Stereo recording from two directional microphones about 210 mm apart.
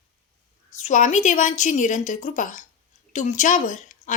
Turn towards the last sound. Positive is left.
turn(degrees=35)  # may be behind; listen again after turning